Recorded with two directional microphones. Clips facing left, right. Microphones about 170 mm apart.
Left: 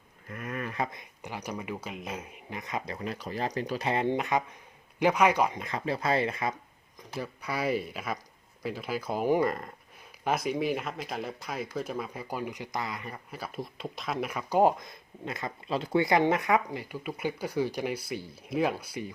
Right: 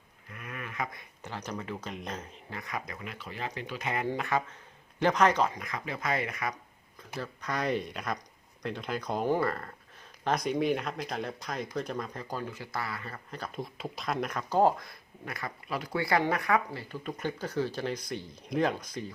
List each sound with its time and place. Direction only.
0.3 s a sound: 45° left (ahead or behind)
0.9 s speech: 10° left (ahead or behind)
5.5 s speech: 30° left (ahead or behind)
7.2 s speech: 10° left (ahead or behind)
10.2 s speech: 5° left (ahead or behind)